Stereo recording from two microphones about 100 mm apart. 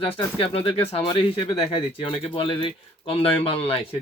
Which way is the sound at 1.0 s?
60° left (ahead or behind).